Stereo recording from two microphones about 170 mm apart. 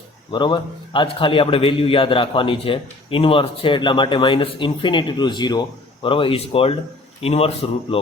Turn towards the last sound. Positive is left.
turn(degrees=35)  # may be behind; listen again after turning